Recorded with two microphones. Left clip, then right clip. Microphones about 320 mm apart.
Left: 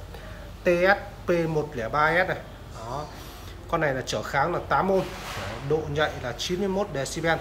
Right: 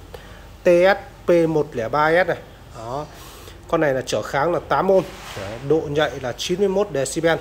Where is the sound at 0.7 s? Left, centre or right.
Right.